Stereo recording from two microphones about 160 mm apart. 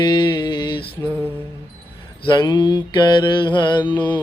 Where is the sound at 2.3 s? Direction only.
25° left (ahead or behind).